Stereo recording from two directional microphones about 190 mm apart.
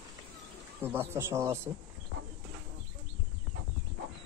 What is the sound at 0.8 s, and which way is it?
Speech, 15° right (ahead or behind).